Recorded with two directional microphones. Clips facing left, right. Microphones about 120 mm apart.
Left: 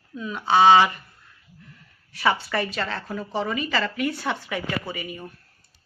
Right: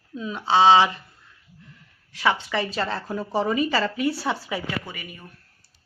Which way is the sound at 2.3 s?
20° right (ahead or behind).